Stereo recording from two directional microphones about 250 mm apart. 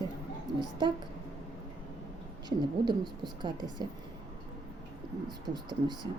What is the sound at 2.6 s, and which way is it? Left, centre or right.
Speech, centre.